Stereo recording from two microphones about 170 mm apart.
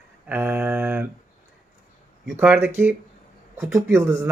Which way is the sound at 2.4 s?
10° right (ahead or behind).